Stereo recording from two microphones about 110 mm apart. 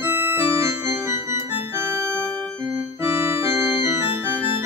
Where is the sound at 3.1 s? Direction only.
25° right (ahead or behind).